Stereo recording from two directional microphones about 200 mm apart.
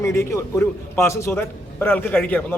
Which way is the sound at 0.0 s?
15° left (ahead or behind).